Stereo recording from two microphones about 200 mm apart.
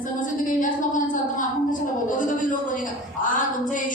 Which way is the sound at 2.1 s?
40° left (ahead or behind).